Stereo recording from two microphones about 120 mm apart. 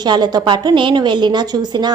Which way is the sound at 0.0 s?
35° right (ahead or behind).